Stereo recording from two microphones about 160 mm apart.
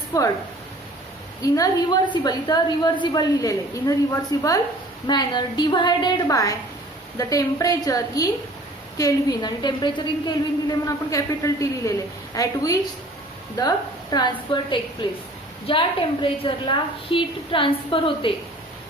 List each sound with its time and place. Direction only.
1.4 s a woman's voice: 20° left (ahead or behind)